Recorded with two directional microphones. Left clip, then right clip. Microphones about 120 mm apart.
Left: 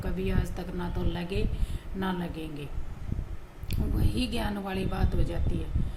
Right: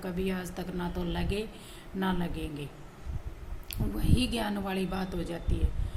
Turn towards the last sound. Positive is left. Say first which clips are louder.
# left 1 dB
turn(degrees=-10)  # may be behind; listen again after turning